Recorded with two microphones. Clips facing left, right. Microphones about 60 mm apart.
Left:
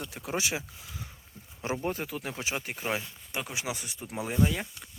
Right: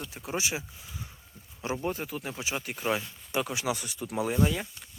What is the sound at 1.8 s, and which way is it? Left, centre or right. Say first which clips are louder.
Speech: even; left.